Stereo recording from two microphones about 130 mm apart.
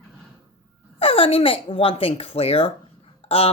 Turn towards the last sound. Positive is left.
turn(degrees=50)  # may be behind; listen again after turning